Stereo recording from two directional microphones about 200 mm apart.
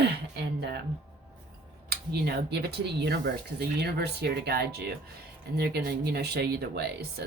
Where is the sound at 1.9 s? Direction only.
55° right (ahead or behind).